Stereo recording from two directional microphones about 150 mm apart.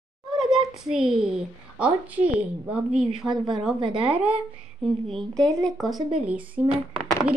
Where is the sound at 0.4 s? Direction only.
Centre (ahead or behind).